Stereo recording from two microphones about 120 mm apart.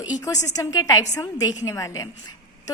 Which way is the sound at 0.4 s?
30° left (ahead or behind).